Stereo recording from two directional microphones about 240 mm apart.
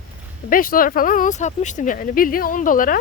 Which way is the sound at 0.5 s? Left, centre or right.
Left.